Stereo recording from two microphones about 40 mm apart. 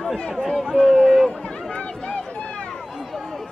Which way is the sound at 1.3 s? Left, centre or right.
Left.